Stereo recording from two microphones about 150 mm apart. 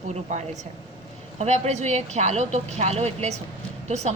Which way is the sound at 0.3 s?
55° right (ahead or behind).